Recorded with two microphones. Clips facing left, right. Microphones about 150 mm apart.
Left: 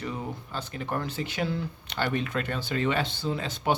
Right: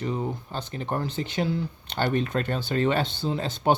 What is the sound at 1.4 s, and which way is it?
Speech, 15° right (ahead or behind).